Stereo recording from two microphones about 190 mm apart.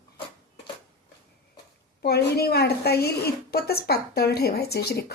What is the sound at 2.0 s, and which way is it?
Speech, 55° left (ahead or behind).